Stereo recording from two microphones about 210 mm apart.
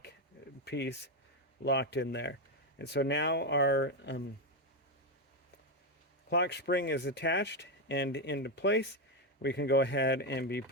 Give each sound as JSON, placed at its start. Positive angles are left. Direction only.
{"t": 0.6, "sound": "speech", "side_deg": 55}
{"t": 6.3, "sound": "speech", "side_deg": 55}